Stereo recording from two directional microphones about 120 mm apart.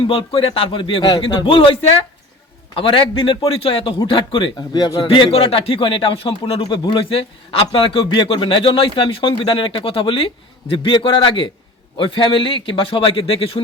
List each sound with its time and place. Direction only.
0.1 s a man's voice: 45° left (ahead or behind)
2.7 s a man's voice: 45° left (ahead or behind)
5.0 s a man's voice: 50° left (ahead or behind)
6.7 s a man's voice: 40° left (ahead or behind)